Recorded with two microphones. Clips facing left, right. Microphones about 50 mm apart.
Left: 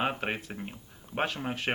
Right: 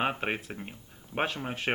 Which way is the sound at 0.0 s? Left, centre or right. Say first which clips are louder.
Right 1 dB; centre.